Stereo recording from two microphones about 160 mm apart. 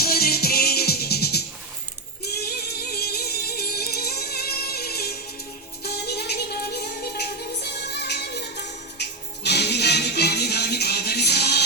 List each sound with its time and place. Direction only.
0.0 s music: 75° left (ahead or behind); by 11.6 s 90° left